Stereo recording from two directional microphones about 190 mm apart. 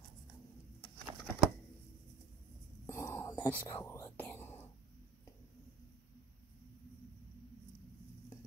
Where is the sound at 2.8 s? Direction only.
15° left (ahead or behind).